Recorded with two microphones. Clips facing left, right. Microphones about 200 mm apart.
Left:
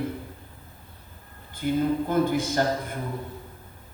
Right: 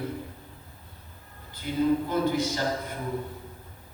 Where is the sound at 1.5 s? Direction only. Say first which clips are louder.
Left 1 dB; 50° left (ahead or behind).